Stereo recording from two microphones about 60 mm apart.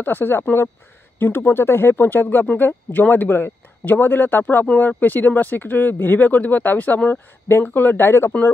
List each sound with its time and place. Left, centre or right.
0.0 s speech: left
2.2 s speech: left